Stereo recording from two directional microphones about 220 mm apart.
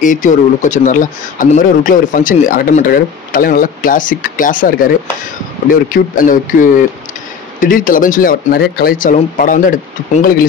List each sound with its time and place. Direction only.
0.0 s speech: 35° left (ahead or behind)